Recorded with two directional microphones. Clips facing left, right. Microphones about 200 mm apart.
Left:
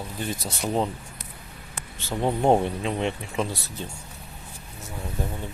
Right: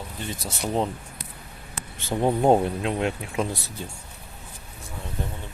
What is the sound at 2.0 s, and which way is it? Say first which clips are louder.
Speech: right 2 dB; 15° right (ahead or behind).